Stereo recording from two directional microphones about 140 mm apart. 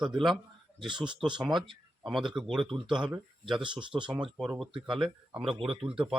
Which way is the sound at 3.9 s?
5° right (ahead or behind).